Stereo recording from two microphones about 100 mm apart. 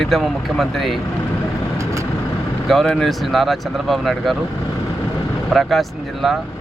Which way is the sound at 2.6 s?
5° left (ahead or behind).